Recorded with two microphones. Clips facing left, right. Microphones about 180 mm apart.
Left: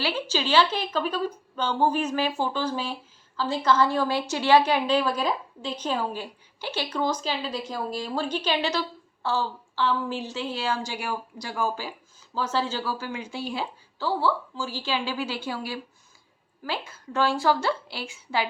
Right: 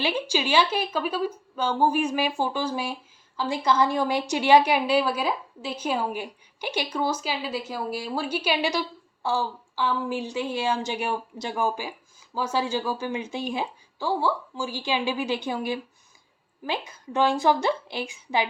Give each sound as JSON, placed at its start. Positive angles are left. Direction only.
{"t": 0.0, "sound": "a woman's voice", "side_deg": -15}